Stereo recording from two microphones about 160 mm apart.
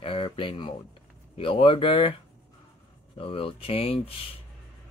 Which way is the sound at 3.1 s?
35° left (ahead or behind).